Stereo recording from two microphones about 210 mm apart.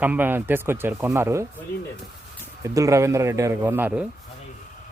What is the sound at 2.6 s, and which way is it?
Speech, 15° right (ahead or behind).